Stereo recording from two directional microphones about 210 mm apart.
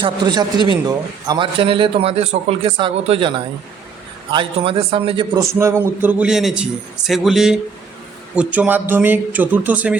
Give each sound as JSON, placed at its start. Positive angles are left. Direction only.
{"t": 0.0, "sound": "a man's voice", "side_deg": -20}